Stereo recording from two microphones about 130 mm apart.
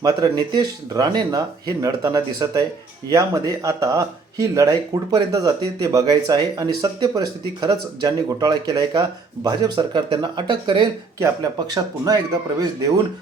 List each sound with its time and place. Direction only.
0.0 s speech: 30° right (ahead or behind)
9.7 s speech: 45° right (ahead or behind); by 12.9 s 30° right (ahead or behind)